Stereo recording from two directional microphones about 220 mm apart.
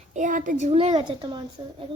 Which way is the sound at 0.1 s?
35° right (ahead or behind).